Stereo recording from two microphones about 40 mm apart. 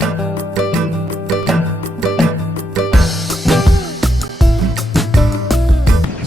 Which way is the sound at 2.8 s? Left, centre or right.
Centre.